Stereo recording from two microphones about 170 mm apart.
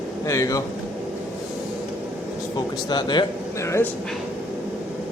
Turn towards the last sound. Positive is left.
turn(degrees=15)  # may be behind; listen again after turning